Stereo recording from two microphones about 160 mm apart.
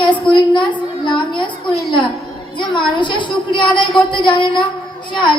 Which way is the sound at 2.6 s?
30° left (ahead or behind).